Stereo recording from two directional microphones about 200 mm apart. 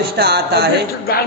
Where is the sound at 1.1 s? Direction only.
50° left (ahead or behind).